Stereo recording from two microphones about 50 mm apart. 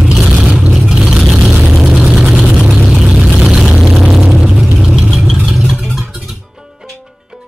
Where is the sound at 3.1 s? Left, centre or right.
Centre.